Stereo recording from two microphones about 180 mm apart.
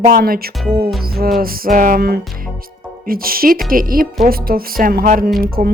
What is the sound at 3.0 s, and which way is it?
Speech, 55° right (ahead or behind).